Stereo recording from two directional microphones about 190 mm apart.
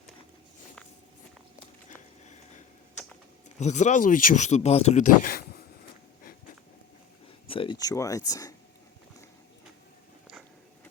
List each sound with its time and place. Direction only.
3.6 s speech: 40° left (ahead or behind)
5.2 s a sound: 55° left (ahead or behind)
7.4 s speech: 30° left (ahead or behind)